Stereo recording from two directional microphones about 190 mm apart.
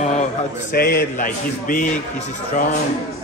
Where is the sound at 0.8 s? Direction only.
50° left (ahead or behind).